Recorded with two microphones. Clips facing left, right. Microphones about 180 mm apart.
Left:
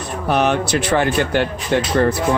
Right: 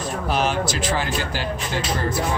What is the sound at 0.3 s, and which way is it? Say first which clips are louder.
Speech: left 6 dB; 60° left (ahead or behind).